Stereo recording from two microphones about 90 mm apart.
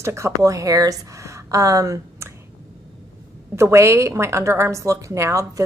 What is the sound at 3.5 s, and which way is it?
A woman's voice, 30° right (ahead or behind).